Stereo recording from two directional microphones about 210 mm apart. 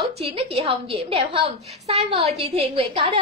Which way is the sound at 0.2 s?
30° right (ahead or behind).